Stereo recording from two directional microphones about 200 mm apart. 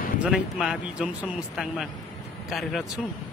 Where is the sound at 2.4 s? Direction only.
Centre (ahead or behind).